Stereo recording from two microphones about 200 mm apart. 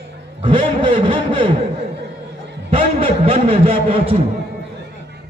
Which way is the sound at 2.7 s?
30° right (ahead or behind).